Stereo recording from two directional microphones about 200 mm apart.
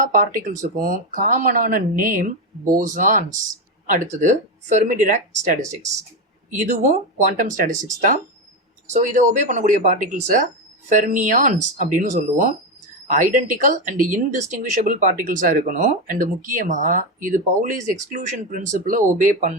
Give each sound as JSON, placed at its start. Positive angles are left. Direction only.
{"t": 0.0, "sound": "speech", "side_deg": -40}
{"t": 6.6, "sound": "speech", "side_deg": -40}